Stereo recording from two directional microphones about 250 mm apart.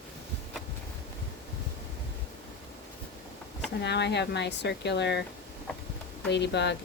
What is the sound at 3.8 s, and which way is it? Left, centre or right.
Speech, left.